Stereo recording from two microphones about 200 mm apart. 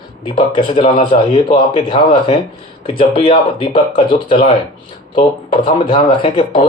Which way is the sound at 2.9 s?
25° left (ahead or behind).